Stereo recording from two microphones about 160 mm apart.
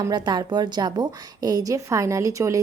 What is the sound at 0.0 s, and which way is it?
A woman's voice, 25° right (ahead or behind).